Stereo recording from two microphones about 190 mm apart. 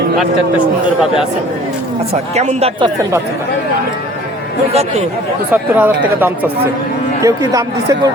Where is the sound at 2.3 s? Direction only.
35° right (ahead or behind).